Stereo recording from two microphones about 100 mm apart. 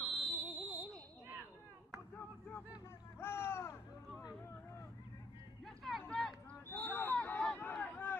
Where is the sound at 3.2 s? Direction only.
25° left (ahead or behind).